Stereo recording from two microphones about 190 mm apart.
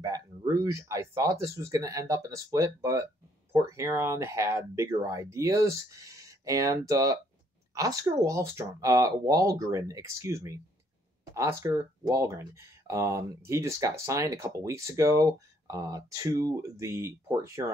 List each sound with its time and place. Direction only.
0.0 s a woman's voice: 20° right (ahead or behind)